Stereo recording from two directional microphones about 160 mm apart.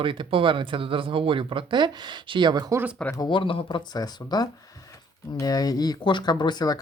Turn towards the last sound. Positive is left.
turn(degrees=25)  # may be behind; listen again after turning